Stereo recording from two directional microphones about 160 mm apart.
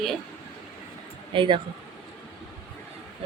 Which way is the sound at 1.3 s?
30° right (ahead or behind).